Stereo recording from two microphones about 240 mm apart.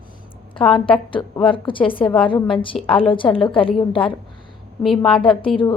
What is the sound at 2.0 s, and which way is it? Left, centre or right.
Speech, centre.